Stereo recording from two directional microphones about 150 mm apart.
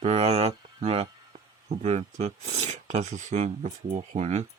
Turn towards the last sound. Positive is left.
turn(degrees=-45)  # may be behind; listen again after turning